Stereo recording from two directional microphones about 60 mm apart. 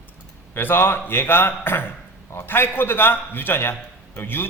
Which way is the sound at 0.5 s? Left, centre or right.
Left.